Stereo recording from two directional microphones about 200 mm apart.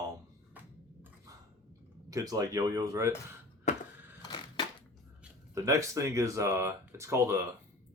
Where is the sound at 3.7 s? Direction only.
35° left (ahead or behind).